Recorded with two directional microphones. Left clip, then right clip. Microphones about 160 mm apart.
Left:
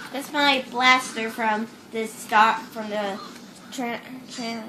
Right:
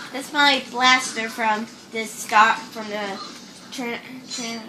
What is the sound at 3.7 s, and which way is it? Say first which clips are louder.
Speech: right 1 dB; 40° left (ahead or behind).